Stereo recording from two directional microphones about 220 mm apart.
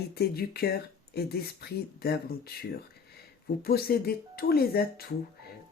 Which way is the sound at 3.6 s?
45° left (ahead or behind).